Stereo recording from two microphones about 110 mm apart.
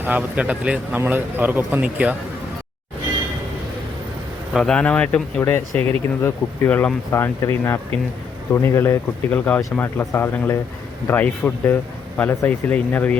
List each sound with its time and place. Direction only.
0.0 s a man's voice: 15° right (ahead or behind)
4.5 s speech: 5° left (ahead or behind)
5.4 s speech: 20° left (ahead or behind)
9.3 s speech: 15° left (ahead or behind)